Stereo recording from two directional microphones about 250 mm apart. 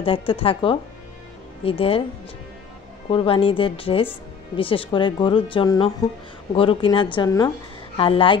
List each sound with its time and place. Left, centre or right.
0.0 s speech: left
3.1 s speech: left